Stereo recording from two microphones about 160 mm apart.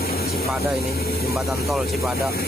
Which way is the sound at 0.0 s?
70° left (ahead or behind).